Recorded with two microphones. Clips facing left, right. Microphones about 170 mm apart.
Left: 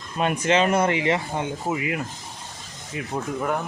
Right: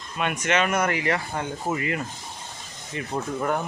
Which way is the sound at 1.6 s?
5° left (ahead or behind).